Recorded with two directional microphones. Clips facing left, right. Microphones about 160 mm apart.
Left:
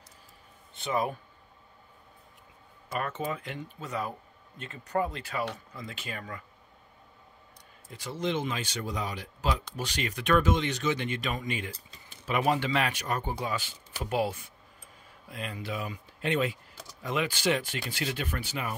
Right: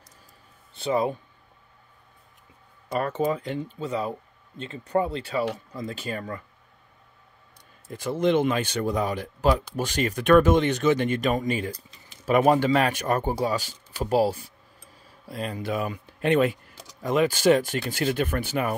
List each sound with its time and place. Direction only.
0.7 s speech: 30° right (ahead or behind)
3.0 s speech: 35° right (ahead or behind)
7.9 s speech: 50° right (ahead or behind)
17.0 s speech: 45° right (ahead or behind)